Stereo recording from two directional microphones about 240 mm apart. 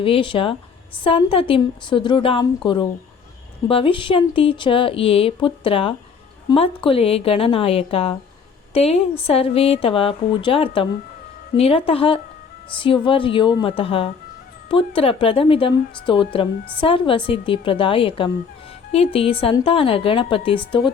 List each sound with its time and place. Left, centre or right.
0.0 s speech: left
3.7 s speech: left